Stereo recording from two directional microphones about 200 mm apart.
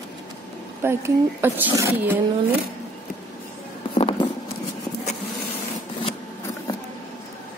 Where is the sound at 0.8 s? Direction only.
10° right (ahead or behind).